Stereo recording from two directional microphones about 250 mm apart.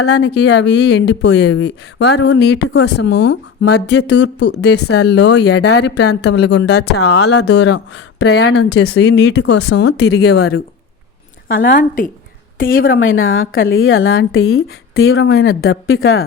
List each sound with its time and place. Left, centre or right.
0.1 s speech: left
11.8 s a woman's voice: left
13.0 s speech: left